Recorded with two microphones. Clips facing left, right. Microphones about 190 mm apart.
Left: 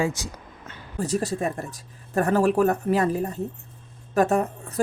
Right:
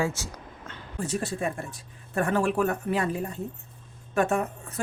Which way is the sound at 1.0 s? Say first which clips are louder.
Left 4 dB; 40° left (ahead or behind).